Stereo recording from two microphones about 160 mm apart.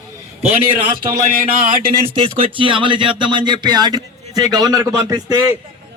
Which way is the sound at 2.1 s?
35° right (ahead or behind).